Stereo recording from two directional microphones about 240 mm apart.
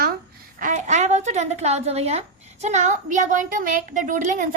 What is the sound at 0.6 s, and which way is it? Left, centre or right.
A woman's voice, right.